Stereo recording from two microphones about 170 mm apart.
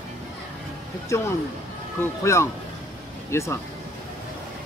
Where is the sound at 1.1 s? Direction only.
15° left (ahead or behind).